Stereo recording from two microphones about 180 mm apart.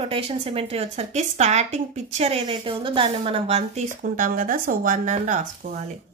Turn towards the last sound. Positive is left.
turn(degrees=-45)  # may be behind; listen again after turning